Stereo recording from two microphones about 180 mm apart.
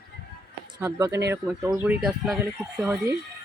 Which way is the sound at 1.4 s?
Centre (ahead or behind).